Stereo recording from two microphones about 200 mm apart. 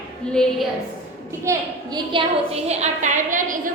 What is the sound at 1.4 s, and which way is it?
A woman's voice, 20° right (ahead or behind).